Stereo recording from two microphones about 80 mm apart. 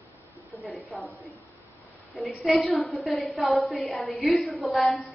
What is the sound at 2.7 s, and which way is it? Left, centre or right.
A woman's voice, centre.